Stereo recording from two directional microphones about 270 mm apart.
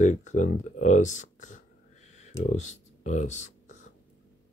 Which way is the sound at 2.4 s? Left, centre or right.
Left.